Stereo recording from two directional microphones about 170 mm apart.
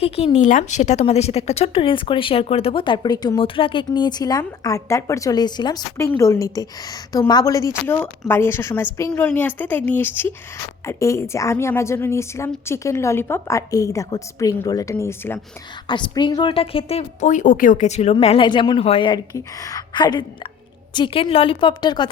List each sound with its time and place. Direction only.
0.3 s a woman's voice: 45° left (ahead or behind); by 15.4 s 15° left (ahead or behind)
15.9 s a woman's voice: 25° left (ahead or behind)